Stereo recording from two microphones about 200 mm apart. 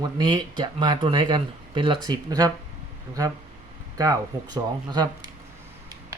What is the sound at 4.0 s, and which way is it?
Speech, 20° right (ahead or behind).